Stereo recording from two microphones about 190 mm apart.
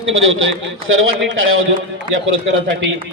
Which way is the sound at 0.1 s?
90° right.